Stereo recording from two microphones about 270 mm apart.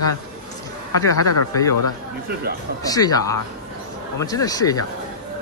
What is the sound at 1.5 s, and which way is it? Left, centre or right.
Speech, centre.